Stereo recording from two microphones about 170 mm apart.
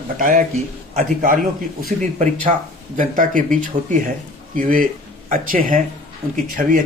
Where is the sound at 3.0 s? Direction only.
50° right (ahead or behind).